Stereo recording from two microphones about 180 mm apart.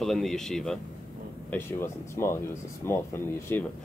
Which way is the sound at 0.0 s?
Centre (ahead or behind).